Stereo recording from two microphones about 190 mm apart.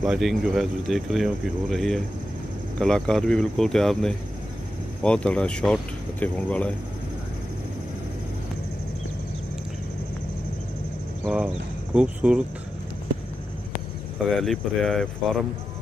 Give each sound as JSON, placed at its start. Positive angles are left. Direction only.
{"t": 0.0, "sound": "speech", "side_deg": 0}
{"t": 11.2, "sound": "speech", "side_deg": -5}
{"t": 14.1, "sound": "speech", "side_deg": 0}